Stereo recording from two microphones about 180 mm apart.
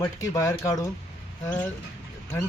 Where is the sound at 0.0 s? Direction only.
20° left (ahead or behind).